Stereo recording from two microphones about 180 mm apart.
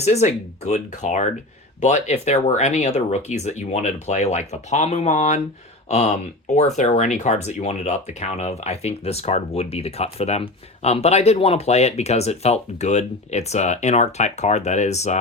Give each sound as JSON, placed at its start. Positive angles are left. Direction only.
{"t": 0.0, "sound": "speech", "side_deg": 40}